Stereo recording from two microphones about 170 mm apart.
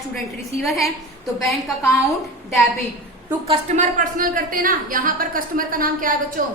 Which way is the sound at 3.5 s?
45° right (ahead or behind).